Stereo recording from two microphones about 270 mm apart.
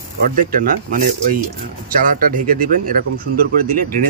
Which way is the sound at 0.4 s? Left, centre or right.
Right.